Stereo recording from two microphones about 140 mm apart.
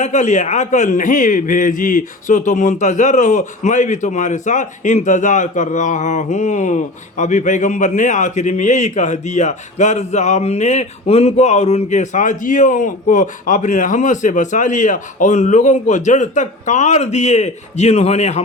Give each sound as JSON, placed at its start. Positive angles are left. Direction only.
{"t": 0.0, "sound": "a man's voice", "side_deg": 60}